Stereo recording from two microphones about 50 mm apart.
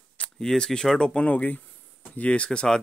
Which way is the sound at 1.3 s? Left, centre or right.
Left.